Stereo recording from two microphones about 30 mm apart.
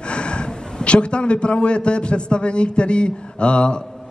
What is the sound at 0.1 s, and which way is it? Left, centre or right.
A man's voice, left.